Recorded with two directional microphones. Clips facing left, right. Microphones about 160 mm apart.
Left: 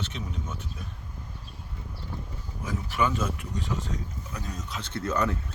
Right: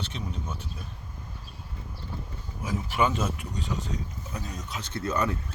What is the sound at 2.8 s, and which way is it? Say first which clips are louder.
Speech: right 1 dB; 20° right (ahead or behind).